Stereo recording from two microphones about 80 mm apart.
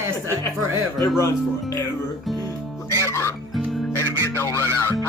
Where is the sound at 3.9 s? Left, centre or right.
Left.